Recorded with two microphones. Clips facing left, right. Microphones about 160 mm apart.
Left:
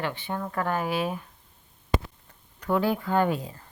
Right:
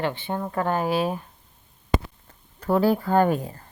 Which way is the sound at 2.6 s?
40° right (ahead or behind).